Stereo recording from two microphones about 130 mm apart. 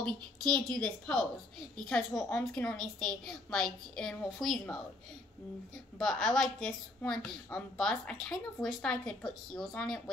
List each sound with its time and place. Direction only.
0.0 s a woman's voice: 5° left (ahead or behind)
2.1 s a woman's voice: 15° left (ahead or behind)
5.9 s a woman's voice: 5° left (ahead or behind)